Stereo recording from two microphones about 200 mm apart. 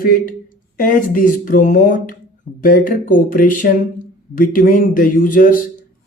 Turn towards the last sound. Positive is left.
turn(degrees=40)  # may be behind; listen again after turning